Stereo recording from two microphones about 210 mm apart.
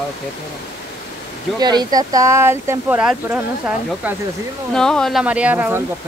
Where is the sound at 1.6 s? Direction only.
20° right (ahead or behind).